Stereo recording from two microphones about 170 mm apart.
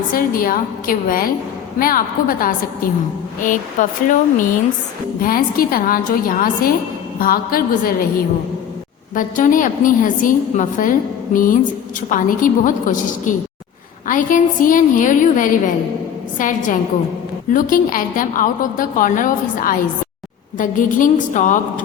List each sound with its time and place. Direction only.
0.1 s a woman's voice: 55° left (ahead or behind)
9.1 s a woman's voice: 50° left (ahead or behind)